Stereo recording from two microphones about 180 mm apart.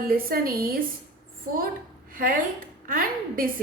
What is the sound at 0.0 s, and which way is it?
Speech, 55° right (ahead or behind).